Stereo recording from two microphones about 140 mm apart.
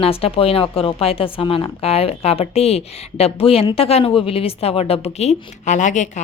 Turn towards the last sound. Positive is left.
turn(degrees=60)  # may be behind; listen again after turning